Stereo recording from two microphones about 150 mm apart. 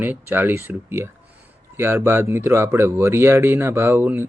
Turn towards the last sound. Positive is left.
turn(degrees=-15)  # may be behind; listen again after turning